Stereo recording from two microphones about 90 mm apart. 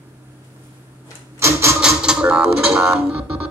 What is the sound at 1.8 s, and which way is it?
Music, 10° right (ahead or behind).